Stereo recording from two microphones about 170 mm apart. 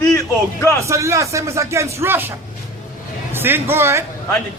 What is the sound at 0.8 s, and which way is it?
Speech, 15° right (ahead or behind).